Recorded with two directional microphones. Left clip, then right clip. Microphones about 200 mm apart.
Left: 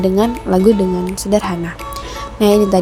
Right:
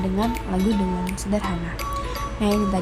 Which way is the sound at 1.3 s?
40° left (ahead or behind).